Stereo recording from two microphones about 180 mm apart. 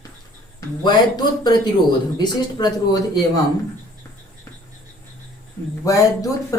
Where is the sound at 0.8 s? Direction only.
25° left (ahead or behind).